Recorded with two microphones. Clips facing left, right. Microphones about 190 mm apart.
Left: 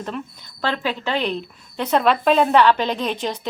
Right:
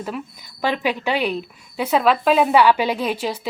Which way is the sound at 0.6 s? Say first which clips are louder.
Right 2 dB; 15° right (ahead or behind).